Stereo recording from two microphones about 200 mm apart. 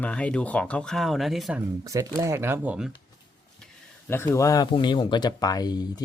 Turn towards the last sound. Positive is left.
turn(degrees=20)  # may be behind; listen again after turning